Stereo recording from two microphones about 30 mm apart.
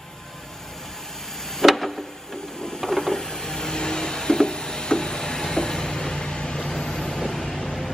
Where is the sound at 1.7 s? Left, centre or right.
Centre.